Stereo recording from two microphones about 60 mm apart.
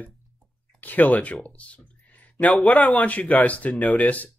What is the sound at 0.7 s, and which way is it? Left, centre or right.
Speech, left.